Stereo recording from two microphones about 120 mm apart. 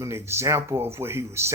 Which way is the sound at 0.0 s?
20° right (ahead or behind).